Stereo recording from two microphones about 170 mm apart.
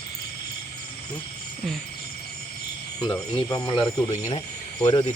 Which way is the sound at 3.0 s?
25° left (ahead or behind).